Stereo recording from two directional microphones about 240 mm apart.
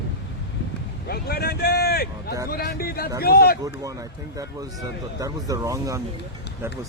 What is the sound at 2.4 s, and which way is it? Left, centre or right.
Speech, left.